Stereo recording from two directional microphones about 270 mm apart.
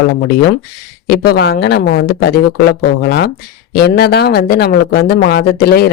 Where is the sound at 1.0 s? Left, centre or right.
Left.